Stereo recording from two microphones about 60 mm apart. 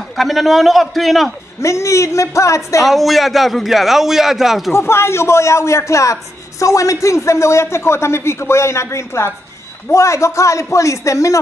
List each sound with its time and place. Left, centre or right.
0.1 s a man's voice: centre
1.6 s a man's voice: left
2.8 s a man's voice: centre
4.7 s a man's voice: left